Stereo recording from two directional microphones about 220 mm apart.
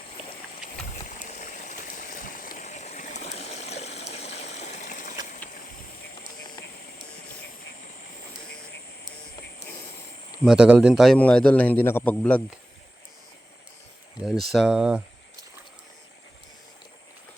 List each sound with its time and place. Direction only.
1.0 s stream: 35° left (ahead or behind)
10.4 s a man's voice: 5° right (ahead or behind)
14.2 s a man's voice: centre (ahead or behind)